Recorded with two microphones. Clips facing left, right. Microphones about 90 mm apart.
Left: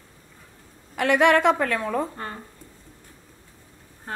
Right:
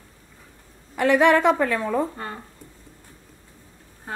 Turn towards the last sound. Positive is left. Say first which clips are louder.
# right 1 dB
turn(degrees=-5)  # may be behind; listen again after turning